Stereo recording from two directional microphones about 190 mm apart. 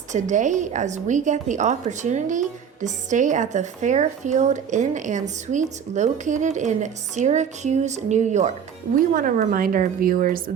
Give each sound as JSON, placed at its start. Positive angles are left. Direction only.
{"t": 0.1, "sound": "a woman's voice", "side_deg": -40}